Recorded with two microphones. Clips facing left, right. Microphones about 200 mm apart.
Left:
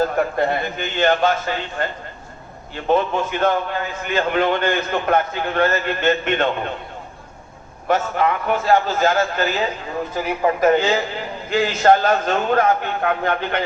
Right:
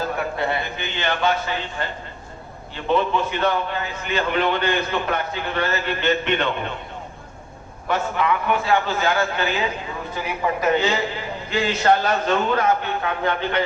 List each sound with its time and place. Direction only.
0.2 s a man's voice: 50° left (ahead or behind)
7.9 s a man's voice: 45° left (ahead or behind)